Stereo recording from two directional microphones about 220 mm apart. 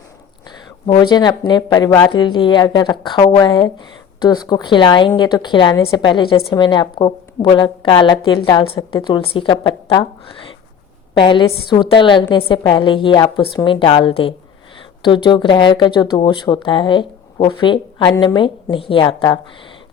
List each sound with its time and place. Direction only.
0.9 s speech: 20° left (ahead or behind)